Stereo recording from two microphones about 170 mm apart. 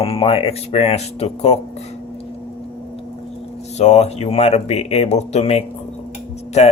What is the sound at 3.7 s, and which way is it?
Speech, 40° left (ahead or behind).